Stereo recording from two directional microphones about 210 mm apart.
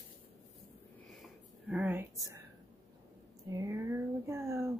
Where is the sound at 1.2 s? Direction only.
5° right (ahead or behind).